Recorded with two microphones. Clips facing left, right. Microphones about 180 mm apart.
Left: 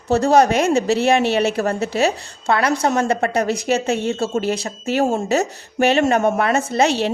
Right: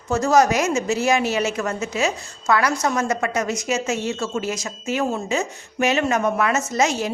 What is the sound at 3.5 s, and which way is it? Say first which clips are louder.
Speech: left 5 dB; 60° left (ahead or behind).